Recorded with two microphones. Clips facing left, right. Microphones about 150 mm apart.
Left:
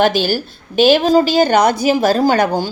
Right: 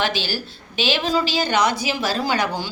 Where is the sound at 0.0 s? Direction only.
50° left (ahead or behind).